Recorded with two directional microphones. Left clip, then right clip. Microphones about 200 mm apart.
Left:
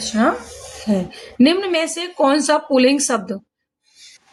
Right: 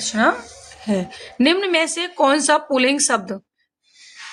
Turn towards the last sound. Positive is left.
turn(degrees=-30)  # may be behind; listen again after turning